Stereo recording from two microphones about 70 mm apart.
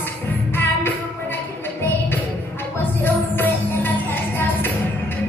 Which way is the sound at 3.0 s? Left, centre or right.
Left.